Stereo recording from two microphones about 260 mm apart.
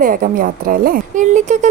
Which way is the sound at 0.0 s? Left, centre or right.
Right.